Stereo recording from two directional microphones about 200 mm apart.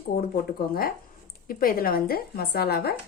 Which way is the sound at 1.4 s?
45° left (ahead or behind).